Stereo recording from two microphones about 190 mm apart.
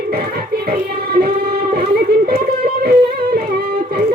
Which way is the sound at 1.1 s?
55° right (ahead or behind).